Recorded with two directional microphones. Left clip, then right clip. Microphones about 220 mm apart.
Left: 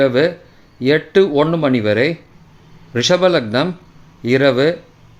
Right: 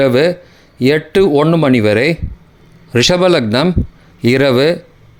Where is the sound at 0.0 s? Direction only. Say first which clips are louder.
Right 3 dB; 35° right (ahead or behind).